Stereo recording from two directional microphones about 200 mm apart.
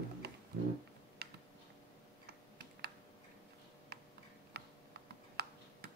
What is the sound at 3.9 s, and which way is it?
Tick-tock, 55° right (ahead or behind).